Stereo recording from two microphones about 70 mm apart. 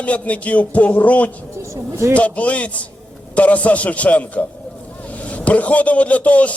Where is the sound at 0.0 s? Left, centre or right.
Centre.